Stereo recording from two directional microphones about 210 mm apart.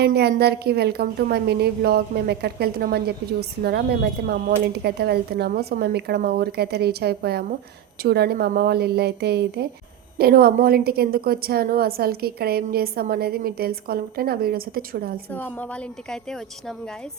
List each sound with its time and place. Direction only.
0.0 s a woman's voice: 50° right (ahead or behind)
15.3 s a woman's voice: 10° left (ahead or behind)